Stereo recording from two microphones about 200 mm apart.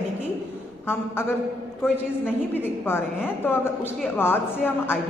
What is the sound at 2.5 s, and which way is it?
A woman's voice, 10° left (ahead or behind).